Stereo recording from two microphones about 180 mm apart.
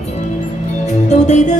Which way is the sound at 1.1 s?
40° left (ahead or behind).